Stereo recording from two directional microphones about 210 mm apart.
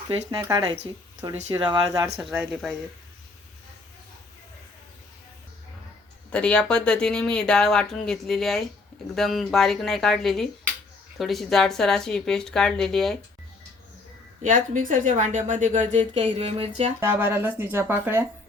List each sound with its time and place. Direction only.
0.1 s speech: 15° right (ahead or behind)
2.1 s speech: 5° right (ahead or behind)
6.3 s speech: 5° left (ahead or behind)
14.4 s a woman's voice: 40° right (ahead or behind)
17.0 s speech: 10° right (ahead or behind)